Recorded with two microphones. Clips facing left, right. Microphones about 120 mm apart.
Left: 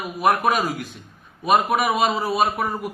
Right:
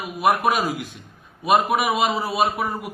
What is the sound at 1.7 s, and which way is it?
Speech, 15° right (ahead or behind).